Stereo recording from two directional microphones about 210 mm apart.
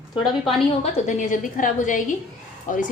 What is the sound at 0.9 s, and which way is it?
A woman's voice, 35° left (ahead or behind).